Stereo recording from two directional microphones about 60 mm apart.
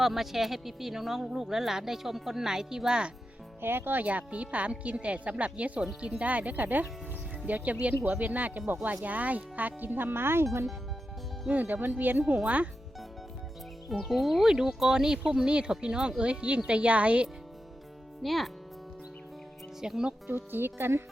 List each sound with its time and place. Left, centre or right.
0.0 s speech: centre
3.6 s speech: right
10.4 s speech: right
11.4 s speech: right
13.9 s speech: centre; by 17.2 s right
18.2 s speech: centre
19.8 s speech: centre
20.2 s speech: right